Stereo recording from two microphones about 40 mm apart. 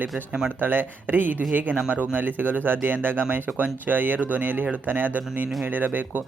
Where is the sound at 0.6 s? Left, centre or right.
Right.